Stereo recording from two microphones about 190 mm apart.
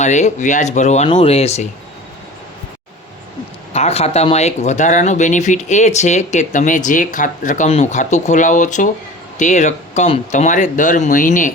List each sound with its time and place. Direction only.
0.0 s speech: 40° left (ahead or behind)
3.7 s speech: 35° left (ahead or behind)